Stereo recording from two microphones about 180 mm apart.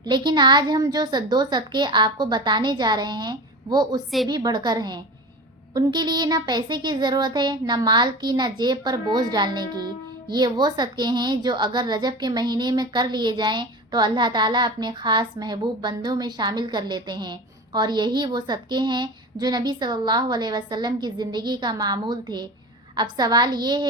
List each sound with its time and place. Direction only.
0.3 s speech: 25° right (ahead or behind)